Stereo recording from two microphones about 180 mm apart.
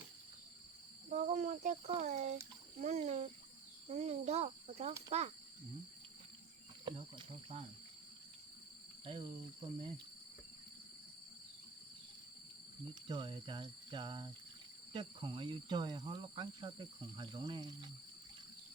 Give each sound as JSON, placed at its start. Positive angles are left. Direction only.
{"t": 1.1, "sound": "speech", "side_deg": -40}
{"t": 6.8, "sound": "speech", "side_deg": -30}
{"t": 9.0, "sound": "speech", "side_deg": -30}
{"t": 12.9, "sound": "speech", "side_deg": -25}